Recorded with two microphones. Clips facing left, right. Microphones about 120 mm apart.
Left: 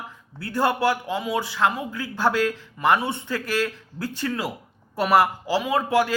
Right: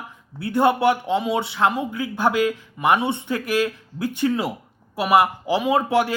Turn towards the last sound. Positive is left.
turn(degrees=-25)  # may be behind; listen again after turning